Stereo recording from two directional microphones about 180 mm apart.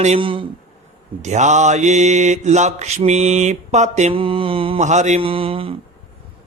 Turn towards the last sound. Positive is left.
turn(degrees=-30)  # may be behind; listen again after turning